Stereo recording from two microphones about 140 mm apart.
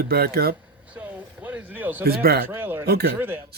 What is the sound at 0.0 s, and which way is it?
Speech, 90° right.